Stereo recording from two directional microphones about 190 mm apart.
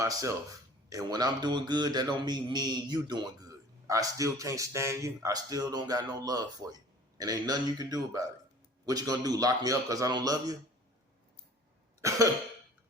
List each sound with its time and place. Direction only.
0.0 s speech: 15° right (ahead or behind)